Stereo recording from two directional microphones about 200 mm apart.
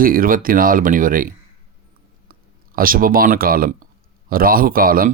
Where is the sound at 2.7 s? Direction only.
45° right (ahead or behind).